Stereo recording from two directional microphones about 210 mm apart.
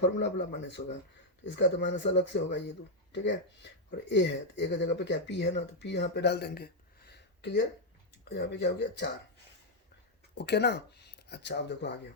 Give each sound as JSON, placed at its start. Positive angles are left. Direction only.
{"t": 0.0, "sound": "speech", "side_deg": 55}
{"t": 10.3, "sound": "speech", "side_deg": 55}